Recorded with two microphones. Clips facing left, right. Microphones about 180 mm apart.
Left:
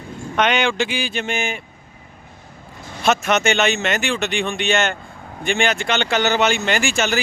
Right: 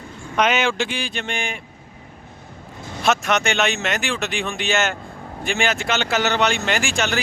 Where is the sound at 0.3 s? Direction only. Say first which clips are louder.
Left 1 dB; centre (ahead or behind).